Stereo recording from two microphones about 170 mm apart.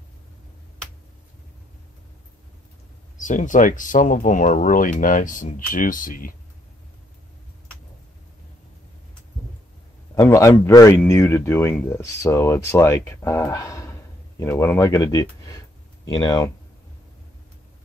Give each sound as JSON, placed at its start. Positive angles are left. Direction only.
{"t": 3.2, "sound": "speech", "side_deg": 50}
{"t": 10.2, "sound": "speech", "side_deg": 20}